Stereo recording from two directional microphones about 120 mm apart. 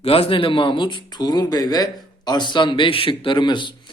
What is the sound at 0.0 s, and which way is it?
Speech, 55° left (ahead or behind).